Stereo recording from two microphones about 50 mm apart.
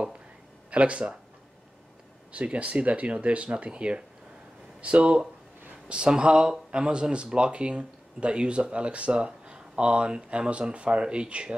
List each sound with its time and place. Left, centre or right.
0.7 s speech: right
2.3 s speech: right